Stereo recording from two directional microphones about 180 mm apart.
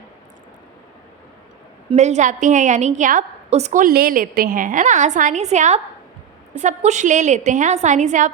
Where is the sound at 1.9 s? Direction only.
40° right (ahead or behind).